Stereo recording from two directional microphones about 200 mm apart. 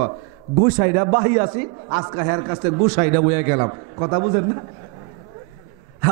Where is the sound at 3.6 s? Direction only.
25° right (ahead or behind).